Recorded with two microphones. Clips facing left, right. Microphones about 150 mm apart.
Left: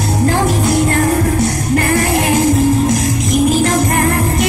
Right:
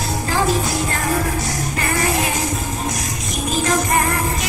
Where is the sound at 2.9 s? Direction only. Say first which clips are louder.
Left 12 dB; 85° left.